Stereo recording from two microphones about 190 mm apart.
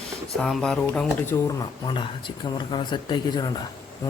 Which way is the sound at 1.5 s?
20° left (ahead or behind).